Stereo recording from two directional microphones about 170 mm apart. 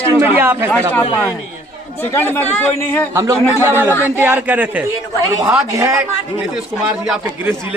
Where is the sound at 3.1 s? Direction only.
20° right (ahead or behind).